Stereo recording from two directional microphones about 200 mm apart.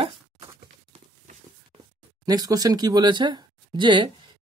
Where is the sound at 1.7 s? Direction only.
25° right (ahead or behind).